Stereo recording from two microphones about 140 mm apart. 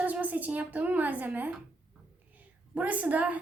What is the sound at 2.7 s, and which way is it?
Speech, 10° right (ahead or behind).